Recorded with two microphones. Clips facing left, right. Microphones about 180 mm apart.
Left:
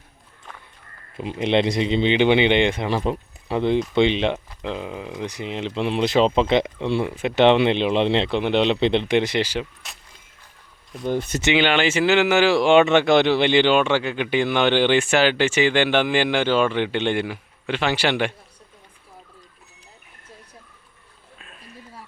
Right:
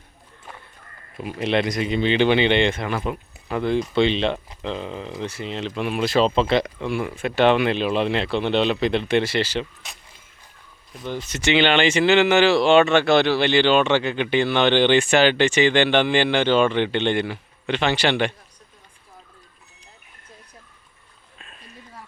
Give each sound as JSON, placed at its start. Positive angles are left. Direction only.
{"t": 1.1, "sound": "speech", "side_deg": 25}
{"t": 2.9, "sound": "speech", "side_deg": 30}
{"t": 9.8, "sound": "a sound", "side_deg": 0}
{"t": 11.0, "sound": "speech", "side_deg": 50}
{"t": 11.5, "sound": "speech", "side_deg": 10}
{"t": 21.3, "sound": "a sound", "side_deg": 5}